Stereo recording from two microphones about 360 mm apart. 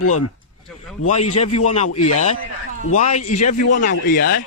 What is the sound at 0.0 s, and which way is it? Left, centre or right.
Speech, left.